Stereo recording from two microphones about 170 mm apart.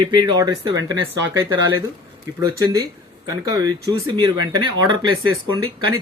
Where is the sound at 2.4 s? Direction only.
20° right (ahead or behind).